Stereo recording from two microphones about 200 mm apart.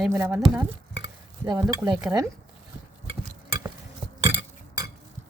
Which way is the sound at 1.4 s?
20° right (ahead or behind).